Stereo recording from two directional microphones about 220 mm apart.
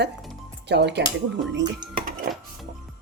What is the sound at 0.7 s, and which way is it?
Speech, 50° right (ahead or behind).